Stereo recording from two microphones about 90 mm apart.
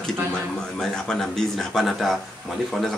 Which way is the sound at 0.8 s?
5° left (ahead or behind).